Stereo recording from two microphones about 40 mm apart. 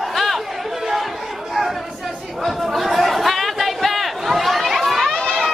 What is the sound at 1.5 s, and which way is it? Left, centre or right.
Chatter, centre.